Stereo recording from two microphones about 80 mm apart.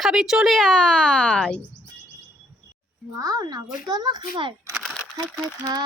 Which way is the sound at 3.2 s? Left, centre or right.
Right.